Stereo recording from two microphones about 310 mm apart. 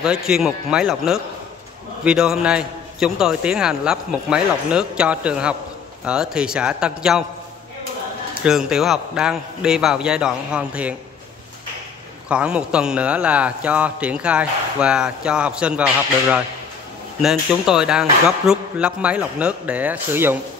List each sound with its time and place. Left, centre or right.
0.0 s a man's voice: centre
8.4 s a man's voice: centre
12.3 s a man's voice: centre